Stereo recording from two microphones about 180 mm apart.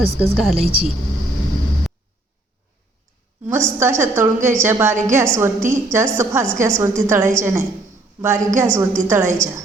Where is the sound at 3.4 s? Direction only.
15° right (ahead or behind).